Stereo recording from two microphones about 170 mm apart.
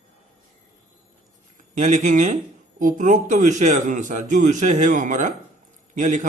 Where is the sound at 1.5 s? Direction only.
45° right (ahead or behind).